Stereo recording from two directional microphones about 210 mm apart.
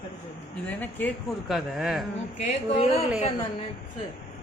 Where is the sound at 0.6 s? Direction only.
10° left (ahead or behind).